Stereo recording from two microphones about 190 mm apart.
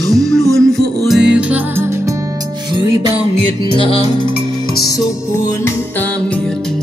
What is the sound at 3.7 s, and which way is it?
Music, 30° left (ahead or behind).